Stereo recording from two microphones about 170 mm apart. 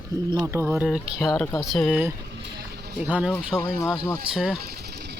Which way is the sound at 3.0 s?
10° right (ahead or behind).